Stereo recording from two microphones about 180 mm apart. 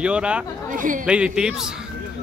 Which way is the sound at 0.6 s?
50° right (ahead or behind).